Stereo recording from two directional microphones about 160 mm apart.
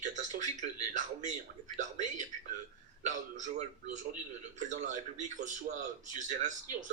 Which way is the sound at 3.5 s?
50° right (ahead or behind).